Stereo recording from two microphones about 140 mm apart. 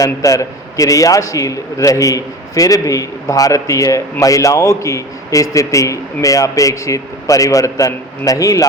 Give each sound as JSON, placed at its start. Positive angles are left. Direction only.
{"t": 0.0, "sound": "a man's voice", "side_deg": 25}